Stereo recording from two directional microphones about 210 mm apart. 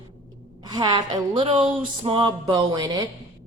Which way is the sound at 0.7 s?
20° right (ahead or behind).